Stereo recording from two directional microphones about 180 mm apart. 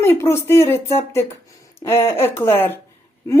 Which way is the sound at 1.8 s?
15° left (ahead or behind).